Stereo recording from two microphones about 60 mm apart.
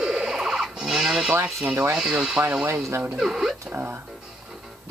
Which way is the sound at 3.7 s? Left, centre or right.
Right.